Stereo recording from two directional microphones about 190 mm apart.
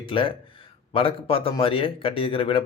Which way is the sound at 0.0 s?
25° left (ahead or behind).